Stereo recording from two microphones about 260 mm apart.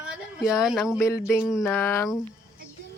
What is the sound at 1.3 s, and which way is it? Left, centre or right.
Speech, centre.